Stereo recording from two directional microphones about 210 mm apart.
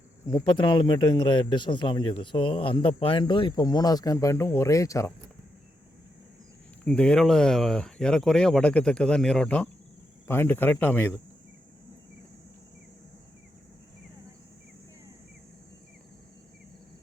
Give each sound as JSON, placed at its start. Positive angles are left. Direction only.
{"t": 0.3, "sound": "a man's voice", "side_deg": 20}
{"t": 6.8, "sound": "speech", "side_deg": 5}